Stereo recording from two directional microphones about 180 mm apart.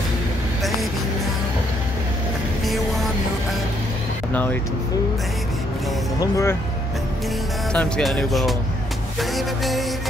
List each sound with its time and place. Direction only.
4.3 s speech: 10° left (ahead or behind)
6.1 s speech: 15° left (ahead or behind)
7.7 s speech: 5° left (ahead or behind)